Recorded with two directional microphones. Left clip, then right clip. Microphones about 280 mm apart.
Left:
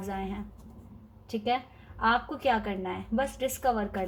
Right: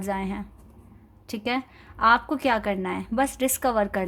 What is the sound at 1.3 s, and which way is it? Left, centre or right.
Speech, right.